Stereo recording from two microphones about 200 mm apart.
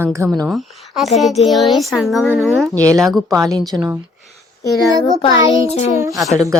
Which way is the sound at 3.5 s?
20° right (ahead or behind).